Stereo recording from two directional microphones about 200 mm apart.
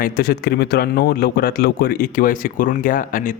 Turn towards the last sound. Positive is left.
turn(degrees=40)  # may be behind; listen again after turning